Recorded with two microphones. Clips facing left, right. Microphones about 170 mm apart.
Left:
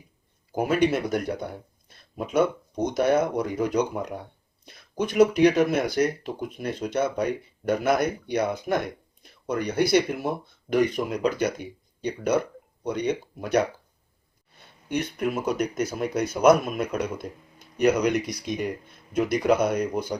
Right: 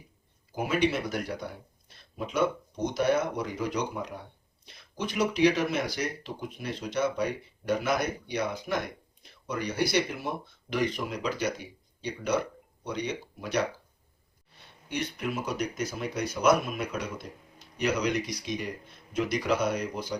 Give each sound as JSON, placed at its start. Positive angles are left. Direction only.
{"t": 0.5, "sound": "speech", "side_deg": 50}
{"t": 12.8, "sound": "speech", "side_deg": 50}